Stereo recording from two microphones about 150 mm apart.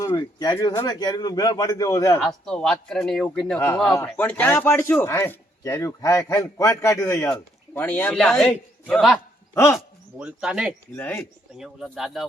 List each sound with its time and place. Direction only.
0.0 s a man's voice: 25° left (ahead or behind)
2.2 s a man's voice: 5° left (ahead or behind)
10.9 s a man's voice: 15° left (ahead or behind)
11.5 s a man's voice: centre (ahead or behind)